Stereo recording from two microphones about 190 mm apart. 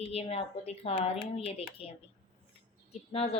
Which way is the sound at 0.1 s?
35° left (ahead or behind).